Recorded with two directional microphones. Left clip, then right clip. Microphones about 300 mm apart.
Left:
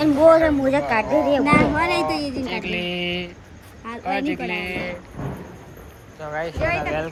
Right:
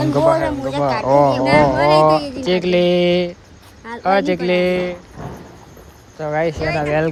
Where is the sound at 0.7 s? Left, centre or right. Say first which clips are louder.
Right 1 dB; left.